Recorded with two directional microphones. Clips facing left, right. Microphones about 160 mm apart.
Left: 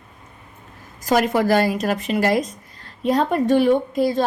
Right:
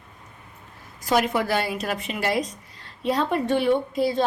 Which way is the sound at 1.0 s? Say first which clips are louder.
Left 4 dB; 45° left (ahead or behind).